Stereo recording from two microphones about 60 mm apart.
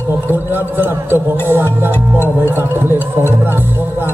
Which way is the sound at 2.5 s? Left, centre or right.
Right.